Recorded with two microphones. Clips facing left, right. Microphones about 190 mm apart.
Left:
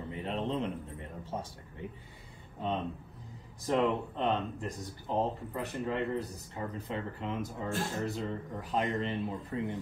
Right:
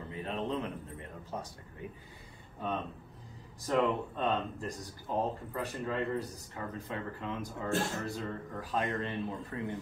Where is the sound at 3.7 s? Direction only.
20° left (ahead or behind).